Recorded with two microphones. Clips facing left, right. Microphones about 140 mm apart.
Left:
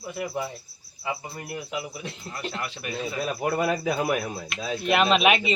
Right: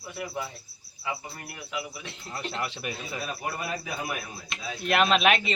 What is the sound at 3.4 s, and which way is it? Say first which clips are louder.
Speech: left 9 dB; 75° left (ahead or behind).